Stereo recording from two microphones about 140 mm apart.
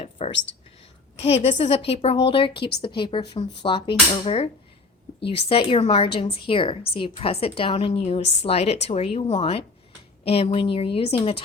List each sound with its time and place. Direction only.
0.2 s whispering: 50° left (ahead or behind)
1.2 s a woman's voice: 45° left (ahead or behind)